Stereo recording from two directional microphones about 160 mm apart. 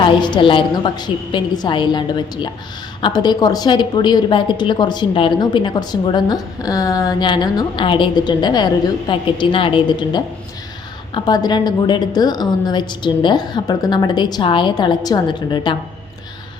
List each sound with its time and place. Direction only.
0.0 s a woman's voice: 30° left (ahead or behind)